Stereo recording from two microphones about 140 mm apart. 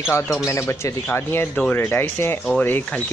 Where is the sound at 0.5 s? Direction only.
20° left (ahead or behind).